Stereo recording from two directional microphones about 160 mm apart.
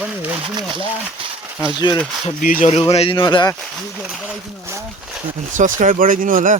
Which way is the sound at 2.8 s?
35° left (ahead or behind).